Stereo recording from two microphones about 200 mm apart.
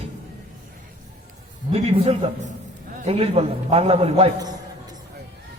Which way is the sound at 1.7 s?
30° right (ahead or behind).